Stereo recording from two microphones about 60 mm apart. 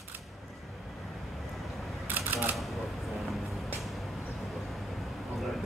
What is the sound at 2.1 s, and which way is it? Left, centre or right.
Typewriter, right.